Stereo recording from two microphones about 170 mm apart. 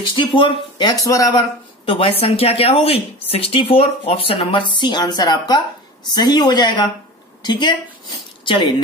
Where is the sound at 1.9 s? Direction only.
30° left (ahead or behind).